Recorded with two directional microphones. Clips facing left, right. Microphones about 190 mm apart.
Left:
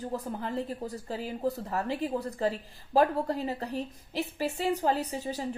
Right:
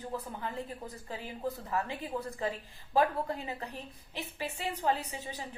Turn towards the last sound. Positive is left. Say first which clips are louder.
# left 8 dB
turn(degrees=40)  # may be behind; listen again after turning